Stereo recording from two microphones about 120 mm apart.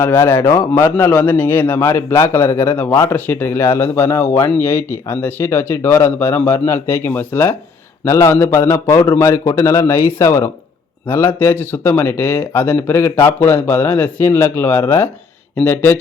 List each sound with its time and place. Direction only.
0.0 s a man's voice: 20° left (ahead or behind)